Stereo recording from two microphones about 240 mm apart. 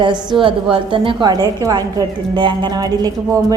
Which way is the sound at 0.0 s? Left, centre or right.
Centre.